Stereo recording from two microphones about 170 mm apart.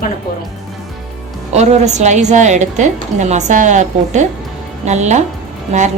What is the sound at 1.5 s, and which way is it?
A woman's voice, 40° right (ahead or behind).